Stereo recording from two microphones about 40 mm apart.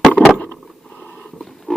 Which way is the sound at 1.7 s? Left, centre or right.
Centre.